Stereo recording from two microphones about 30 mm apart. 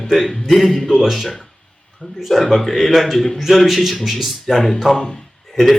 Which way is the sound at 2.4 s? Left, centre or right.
Centre.